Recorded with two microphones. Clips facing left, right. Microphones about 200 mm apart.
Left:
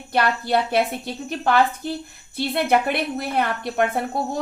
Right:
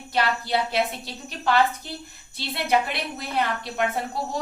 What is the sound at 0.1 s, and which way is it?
A woman's voice, 55° left (ahead or behind).